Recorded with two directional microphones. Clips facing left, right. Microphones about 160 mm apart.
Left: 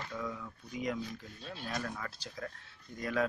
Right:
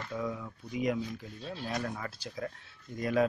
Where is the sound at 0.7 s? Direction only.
10° right (ahead or behind).